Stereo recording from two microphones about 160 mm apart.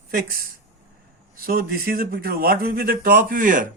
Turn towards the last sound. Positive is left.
turn(degrees=-55)  # may be behind; listen again after turning